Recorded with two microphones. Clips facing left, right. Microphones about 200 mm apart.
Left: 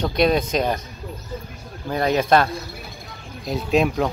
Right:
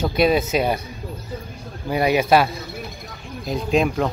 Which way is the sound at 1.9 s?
10° right (ahead or behind).